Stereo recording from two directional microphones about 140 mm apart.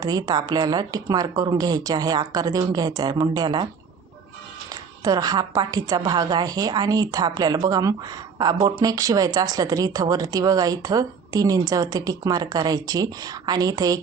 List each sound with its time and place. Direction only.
0.0 s a woman's voice: 30° right (ahead or behind)
4.7 s a woman's voice: 25° right (ahead or behind)